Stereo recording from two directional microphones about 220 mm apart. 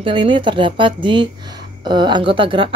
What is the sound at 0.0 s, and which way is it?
A woman's voice, 20° right (ahead or behind).